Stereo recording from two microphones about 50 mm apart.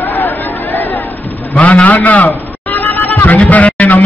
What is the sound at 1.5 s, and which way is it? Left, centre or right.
Music, left.